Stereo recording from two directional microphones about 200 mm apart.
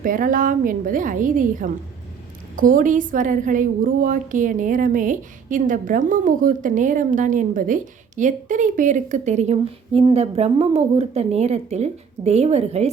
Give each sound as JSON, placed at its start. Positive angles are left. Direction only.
{"t": 0.0, "sound": "a woman's voice", "side_deg": -45}